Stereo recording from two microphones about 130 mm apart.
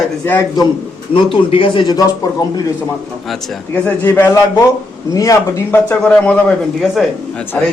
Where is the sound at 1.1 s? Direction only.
45° left (ahead or behind).